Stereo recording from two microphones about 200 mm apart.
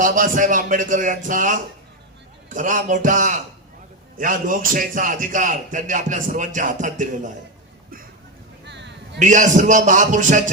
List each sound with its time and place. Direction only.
0.0 s speech: 40° right (ahead or behind)
8.6 s a sound: 60° right (ahead or behind)
9.1 s speech: 40° right (ahead or behind)